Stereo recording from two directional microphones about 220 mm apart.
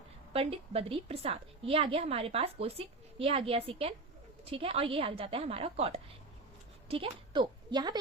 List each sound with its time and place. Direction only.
0.3 s a woman's voice: 25° right (ahead or behind)